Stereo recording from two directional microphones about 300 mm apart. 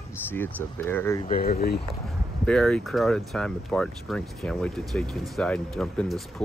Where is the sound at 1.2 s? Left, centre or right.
Left.